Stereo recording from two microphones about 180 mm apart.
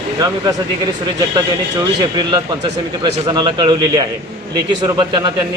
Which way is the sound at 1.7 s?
20° right (ahead or behind).